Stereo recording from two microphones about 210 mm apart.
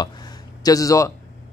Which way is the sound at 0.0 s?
20° left (ahead or behind).